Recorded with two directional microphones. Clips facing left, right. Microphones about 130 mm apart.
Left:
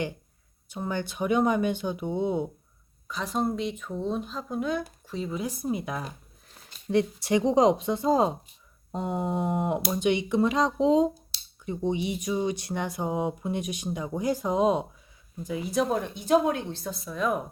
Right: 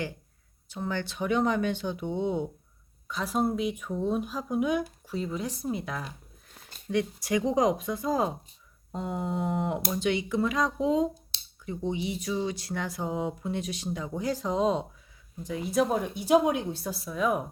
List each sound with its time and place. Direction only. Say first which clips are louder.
0.7 s speech: left 1 dB; 15° left (ahead or behind)
3.1 s speech: right 1 dB; centre (ahead or behind)
5.2 s speech: left 2 dB; 5° left (ahead or behind)
6.8 s speech: left 4 dB; 30° left (ahead or behind); by 17.4 s 5° right (ahead or behind)